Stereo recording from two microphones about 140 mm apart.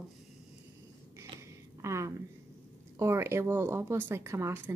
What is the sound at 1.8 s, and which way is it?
A woman's voice, 20° right (ahead or behind).